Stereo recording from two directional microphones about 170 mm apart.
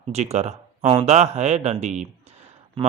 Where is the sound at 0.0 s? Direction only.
40° right (ahead or behind).